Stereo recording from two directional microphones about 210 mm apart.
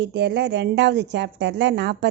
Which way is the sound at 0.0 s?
55° right (ahead or behind).